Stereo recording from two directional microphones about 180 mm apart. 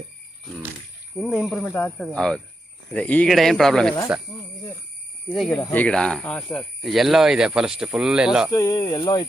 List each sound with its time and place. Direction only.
1.2 s speech: 5° right (ahead or behind)
5.3 s speech: centre (ahead or behind)
8.5 s speech: 15° left (ahead or behind)